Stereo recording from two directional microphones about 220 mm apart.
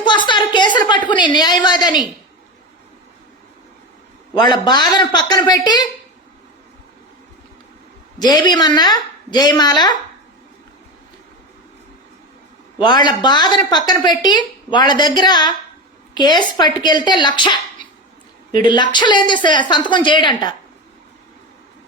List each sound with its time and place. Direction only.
0.0 s a sound: 20° left (ahead or behind)
4.4 s a woman's voice: 20° left (ahead or behind)
8.2 s a woman's voice: 20° left (ahead or behind)
12.8 s a woman's voice: 20° left (ahead or behind)
18.6 s a woman's voice: 20° left (ahead or behind)